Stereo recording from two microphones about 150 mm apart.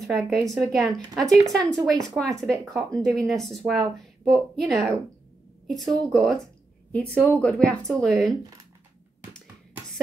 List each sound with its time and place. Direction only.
0.0 s a woman's voice: centre (ahead or behind)